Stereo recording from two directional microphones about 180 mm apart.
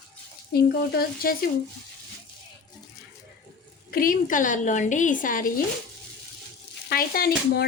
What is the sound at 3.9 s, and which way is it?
A woman's voice, 50° left (ahead or behind).